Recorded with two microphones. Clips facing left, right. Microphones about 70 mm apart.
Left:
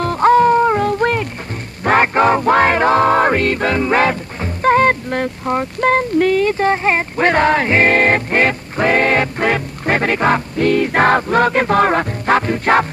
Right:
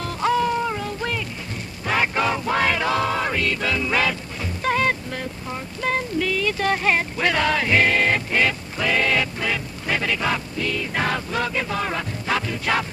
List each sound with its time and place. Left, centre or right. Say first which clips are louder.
0.0 s music: left 10 dB; left